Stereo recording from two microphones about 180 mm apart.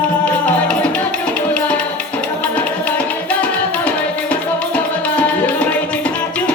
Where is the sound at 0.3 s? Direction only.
5° left (ahead or behind).